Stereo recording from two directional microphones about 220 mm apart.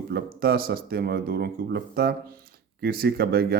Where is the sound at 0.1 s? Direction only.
45° right (ahead or behind).